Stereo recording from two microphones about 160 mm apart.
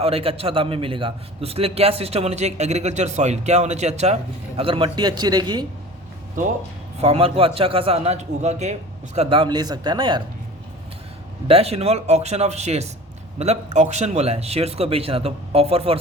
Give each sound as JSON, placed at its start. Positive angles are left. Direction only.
{"t": 0.0, "sound": "a man's voice", "side_deg": -35}
{"t": 7.0, "sound": "a man's voice", "side_deg": -40}
{"t": 9.1, "sound": "speech", "side_deg": -35}
{"t": 11.4, "sound": "a man's voice", "side_deg": -40}